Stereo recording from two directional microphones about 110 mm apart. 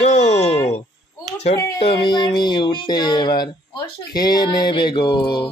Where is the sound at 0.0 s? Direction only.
85° left.